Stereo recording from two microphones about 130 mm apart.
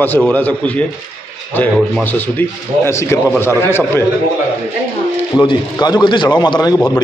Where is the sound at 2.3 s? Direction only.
20° left (ahead or behind).